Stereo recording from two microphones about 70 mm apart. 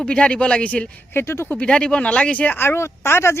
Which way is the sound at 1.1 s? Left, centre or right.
Left.